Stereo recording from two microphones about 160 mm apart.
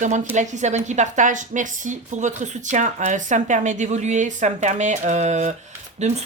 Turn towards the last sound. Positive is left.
turn(degrees=-45)  # may be behind; listen again after turning